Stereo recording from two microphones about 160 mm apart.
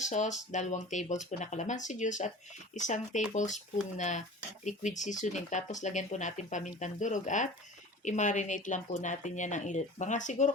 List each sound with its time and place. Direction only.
0.0 s speech: 50° left (ahead or behind)